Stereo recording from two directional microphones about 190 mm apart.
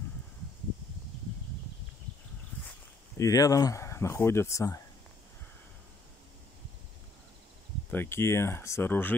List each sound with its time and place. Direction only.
3.2 s speech: 20° left (ahead or behind)
7.9 s speech: 10° left (ahead or behind)